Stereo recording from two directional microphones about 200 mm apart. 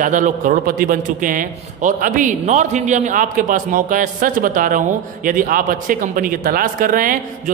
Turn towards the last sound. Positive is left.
turn(degrees=-45)  # may be behind; listen again after turning